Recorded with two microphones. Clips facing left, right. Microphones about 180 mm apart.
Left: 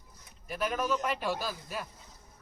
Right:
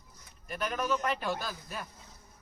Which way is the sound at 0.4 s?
5° left (ahead or behind).